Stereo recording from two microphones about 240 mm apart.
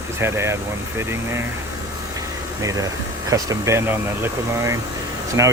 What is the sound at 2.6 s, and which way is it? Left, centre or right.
Speech, centre.